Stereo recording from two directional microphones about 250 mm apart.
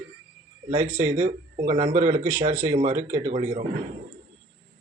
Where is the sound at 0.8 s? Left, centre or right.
Right.